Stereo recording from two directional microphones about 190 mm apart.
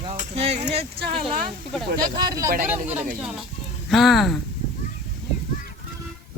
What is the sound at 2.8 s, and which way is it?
Speech, 10° right (ahead or behind).